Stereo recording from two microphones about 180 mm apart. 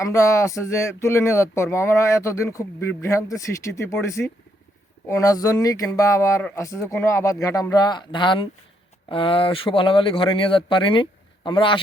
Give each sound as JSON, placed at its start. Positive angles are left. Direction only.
{"t": 0.0, "sound": "speech", "side_deg": 15}